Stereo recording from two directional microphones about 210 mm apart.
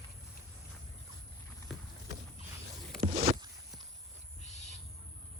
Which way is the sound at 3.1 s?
30° right (ahead or behind).